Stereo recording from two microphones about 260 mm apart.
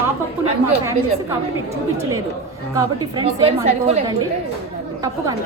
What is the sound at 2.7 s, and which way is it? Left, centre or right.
A woman's voice, centre.